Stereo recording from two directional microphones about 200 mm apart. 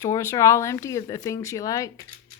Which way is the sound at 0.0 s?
15° left (ahead or behind).